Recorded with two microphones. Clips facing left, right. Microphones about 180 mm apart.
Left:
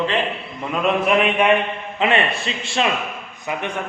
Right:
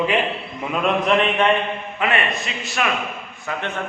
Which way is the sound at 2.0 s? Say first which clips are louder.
Left 3 dB; 30° left (ahead or behind).